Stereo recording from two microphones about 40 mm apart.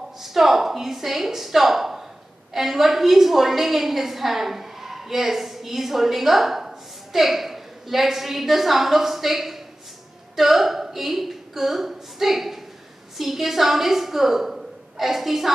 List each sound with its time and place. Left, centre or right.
0.2 s a woman's voice: centre